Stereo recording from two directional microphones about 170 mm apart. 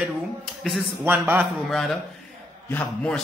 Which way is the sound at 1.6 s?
Centre (ahead or behind).